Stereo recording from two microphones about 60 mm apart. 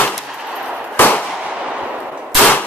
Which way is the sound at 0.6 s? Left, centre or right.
Right.